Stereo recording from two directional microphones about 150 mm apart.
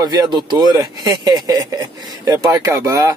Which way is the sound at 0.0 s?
25° right (ahead or behind).